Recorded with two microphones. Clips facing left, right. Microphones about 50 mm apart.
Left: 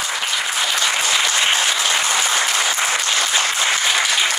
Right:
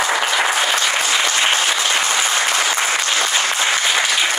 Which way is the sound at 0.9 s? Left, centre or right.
Centre.